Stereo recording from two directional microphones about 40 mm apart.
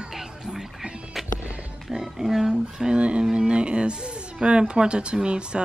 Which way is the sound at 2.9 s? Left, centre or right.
Right.